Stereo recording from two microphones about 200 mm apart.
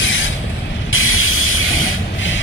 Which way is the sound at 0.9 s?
90° left.